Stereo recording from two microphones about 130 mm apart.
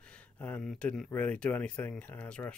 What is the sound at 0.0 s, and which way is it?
Speech, 10° left (ahead or behind).